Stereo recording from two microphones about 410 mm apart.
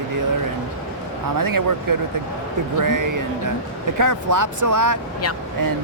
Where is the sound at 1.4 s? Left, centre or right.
Right.